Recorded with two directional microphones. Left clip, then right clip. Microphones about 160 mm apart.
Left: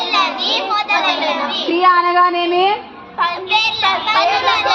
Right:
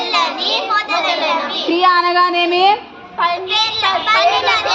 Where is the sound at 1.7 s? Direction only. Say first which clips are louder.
Even; 20° right (ahead or behind).